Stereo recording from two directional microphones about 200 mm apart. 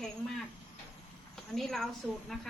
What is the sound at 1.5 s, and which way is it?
Speech, centre (ahead or behind).